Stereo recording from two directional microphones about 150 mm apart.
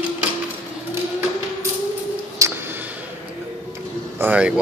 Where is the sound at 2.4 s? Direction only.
20° right (ahead or behind).